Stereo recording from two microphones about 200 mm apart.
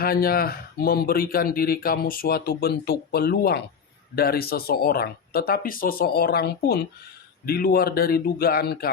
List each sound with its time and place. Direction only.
0.0 s speech: 50° left (ahead or behind)